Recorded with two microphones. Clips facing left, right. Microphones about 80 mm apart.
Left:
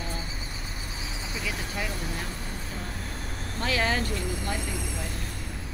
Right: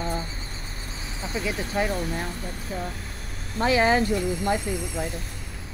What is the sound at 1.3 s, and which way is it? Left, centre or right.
Speech, right.